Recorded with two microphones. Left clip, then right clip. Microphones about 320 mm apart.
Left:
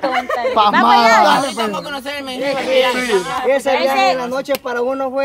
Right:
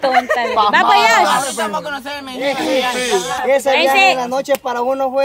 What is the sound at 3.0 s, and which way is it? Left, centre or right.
Speech, centre.